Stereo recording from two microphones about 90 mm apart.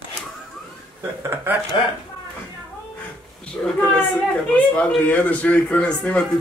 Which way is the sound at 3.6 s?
15° left (ahead or behind).